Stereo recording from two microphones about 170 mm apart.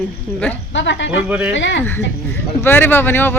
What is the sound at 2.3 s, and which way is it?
Speech, 10° left (ahead or behind).